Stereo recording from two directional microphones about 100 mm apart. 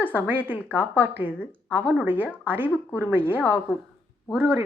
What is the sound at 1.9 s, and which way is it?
A woman's voice, 20° right (ahead or behind).